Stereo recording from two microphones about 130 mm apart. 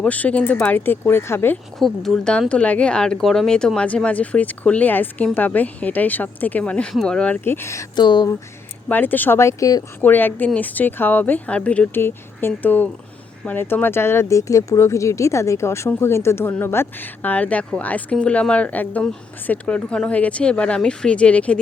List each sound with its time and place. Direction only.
0.0 s speech: 10° left (ahead or behind)
1.8 s speech: 5° left (ahead or behind); by 7.9 s 20° left (ahead or behind)
7.9 s speech: 35° left (ahead or behind)
8.9 s speech: 15° left (ahead or behind)
10.0 s speech: 15° left (ahead or behind)